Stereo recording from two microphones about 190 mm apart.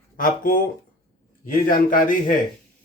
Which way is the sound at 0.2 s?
45° left (ahead or behind).